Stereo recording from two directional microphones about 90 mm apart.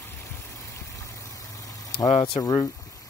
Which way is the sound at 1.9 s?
80° left.